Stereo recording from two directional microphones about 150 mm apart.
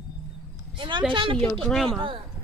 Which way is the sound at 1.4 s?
Centre (ahead or behind).